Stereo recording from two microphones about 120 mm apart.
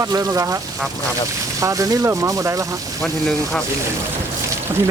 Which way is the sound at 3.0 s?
Centre (ahead or behind).